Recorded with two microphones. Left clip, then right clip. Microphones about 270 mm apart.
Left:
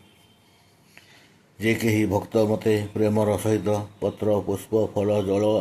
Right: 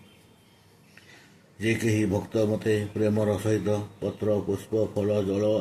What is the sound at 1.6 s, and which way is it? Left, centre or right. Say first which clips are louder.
Speech: left 3 dB; left.